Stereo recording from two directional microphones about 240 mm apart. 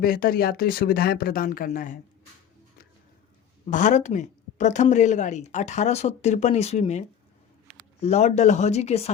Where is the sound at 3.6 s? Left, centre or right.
Left.